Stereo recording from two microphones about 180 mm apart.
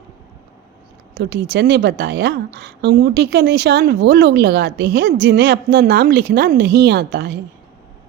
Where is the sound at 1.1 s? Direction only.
70° right (ahead or behind).